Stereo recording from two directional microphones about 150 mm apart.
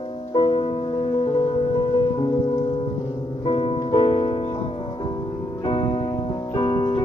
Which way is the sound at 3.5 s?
35° left (ahead or behind).